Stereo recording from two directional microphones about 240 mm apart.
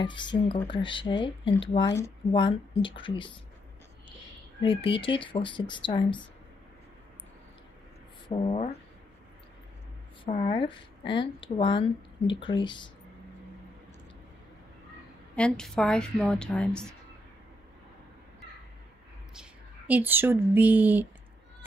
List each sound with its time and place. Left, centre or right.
0.0 s speech: centre
4.6 s speech: left
8.3 s speech: left
10.2 s speech: left
15.3 s a woman's voice: centre
19.9 s speech: centre